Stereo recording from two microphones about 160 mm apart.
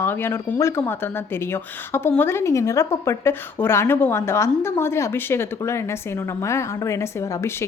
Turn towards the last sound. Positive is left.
turn(degrees=20)  # may be behind; listen again after turning